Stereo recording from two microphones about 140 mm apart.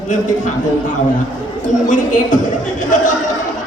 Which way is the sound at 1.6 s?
65° left (ahead or behind).